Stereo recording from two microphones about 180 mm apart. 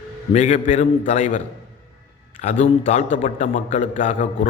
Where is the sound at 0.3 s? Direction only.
45° left (ahead or behind).